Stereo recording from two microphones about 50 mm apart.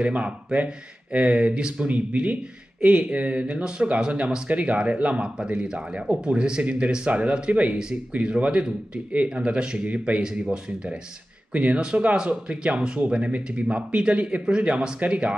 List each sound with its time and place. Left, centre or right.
0.0 s speech: right
11.5 s speech: right